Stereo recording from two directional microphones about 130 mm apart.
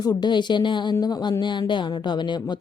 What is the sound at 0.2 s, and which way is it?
Speech, 35° left (ahead or behind).